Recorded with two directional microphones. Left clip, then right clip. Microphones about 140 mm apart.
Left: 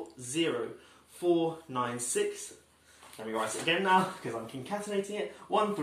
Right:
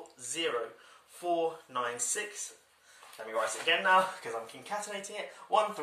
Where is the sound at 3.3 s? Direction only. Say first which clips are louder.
Right 1 dB; 15° left (ahead or behind).